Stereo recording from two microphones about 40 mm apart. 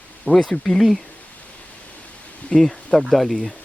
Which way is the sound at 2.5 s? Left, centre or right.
Left.